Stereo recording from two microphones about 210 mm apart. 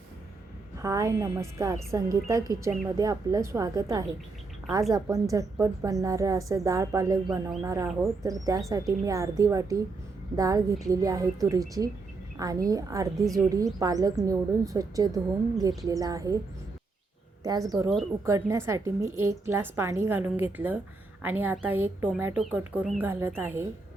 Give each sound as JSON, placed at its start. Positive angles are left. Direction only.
{"t": 0.8, "sound": "a woman's voice", "side_deg": -15}
{"t": 17.4, "sound": "a woman's voice", "side_deg": -15}